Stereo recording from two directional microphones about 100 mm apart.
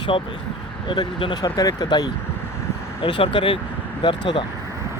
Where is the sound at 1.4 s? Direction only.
40° left (ahead or behind).